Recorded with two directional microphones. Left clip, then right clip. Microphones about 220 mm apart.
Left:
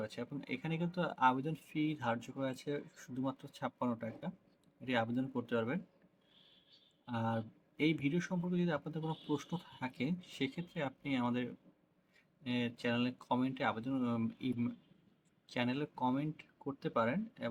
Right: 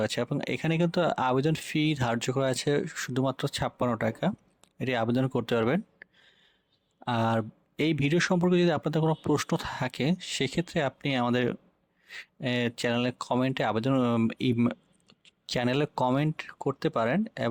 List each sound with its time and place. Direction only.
0.0 s speech: 50° right (ahead or behind)
7.0 s speech: 50° right (ahead or behind)